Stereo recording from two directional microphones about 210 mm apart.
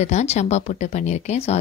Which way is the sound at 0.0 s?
35° left (ahead or behind).